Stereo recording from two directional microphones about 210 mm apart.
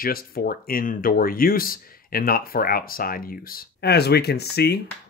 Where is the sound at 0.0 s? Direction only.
45° left (ahead or behind).